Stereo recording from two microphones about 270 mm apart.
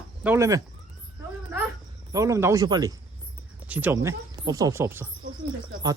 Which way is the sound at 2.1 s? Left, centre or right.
Centre.